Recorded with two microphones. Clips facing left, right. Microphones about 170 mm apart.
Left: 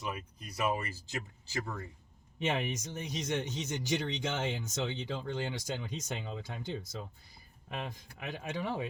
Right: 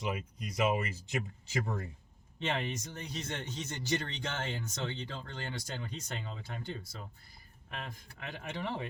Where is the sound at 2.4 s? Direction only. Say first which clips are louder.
Left 2 dB; 15° left (ahead or behind).